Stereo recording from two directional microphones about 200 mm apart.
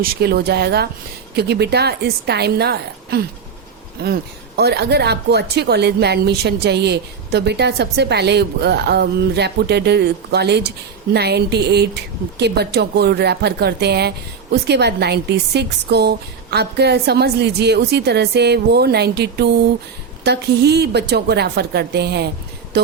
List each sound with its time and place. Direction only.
0.0 s a woman's voice: 50° right (ahead or behind)